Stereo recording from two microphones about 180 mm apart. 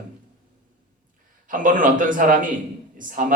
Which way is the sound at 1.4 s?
50° right (ahead or behind).